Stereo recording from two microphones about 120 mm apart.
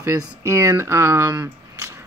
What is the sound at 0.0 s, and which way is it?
Speech, 25° right (ahead or behind).